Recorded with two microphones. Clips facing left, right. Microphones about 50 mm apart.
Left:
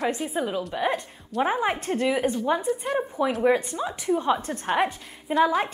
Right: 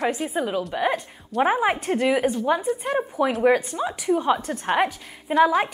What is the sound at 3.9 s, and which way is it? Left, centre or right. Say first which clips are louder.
Speech: right 2 dB; centre.